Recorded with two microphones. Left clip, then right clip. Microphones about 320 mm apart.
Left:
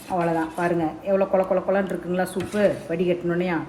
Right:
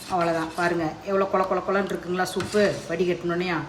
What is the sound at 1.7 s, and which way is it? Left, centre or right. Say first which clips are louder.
Speech: left 2 dB; centre.